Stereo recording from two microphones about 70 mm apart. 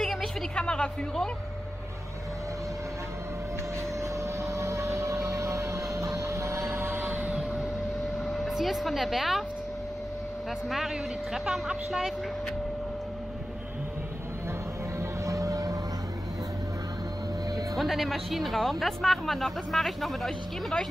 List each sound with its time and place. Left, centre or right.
0.0 s a sound: centre
4.0 s a sound: right
7.1 s vehicle: right
8.3 s speech: centre
11.3 s speech: centre
15.0 s vehicle: right
17.7 s speech: centre